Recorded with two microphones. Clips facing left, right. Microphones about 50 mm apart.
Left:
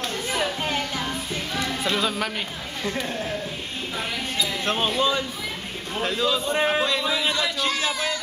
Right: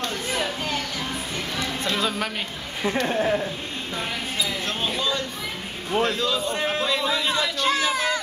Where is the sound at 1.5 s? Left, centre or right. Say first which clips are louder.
Left 2 dB; centre.